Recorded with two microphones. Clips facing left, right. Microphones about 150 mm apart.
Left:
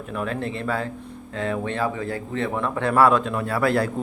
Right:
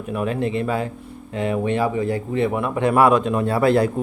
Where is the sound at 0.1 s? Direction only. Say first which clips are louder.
Right 5 dB; 15° right (ahead or behind).